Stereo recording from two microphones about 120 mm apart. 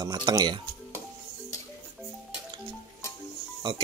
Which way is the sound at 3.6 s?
40° right (ahead or behind).